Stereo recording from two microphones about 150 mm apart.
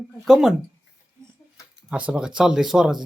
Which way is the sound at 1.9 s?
10° right (ahead or behind).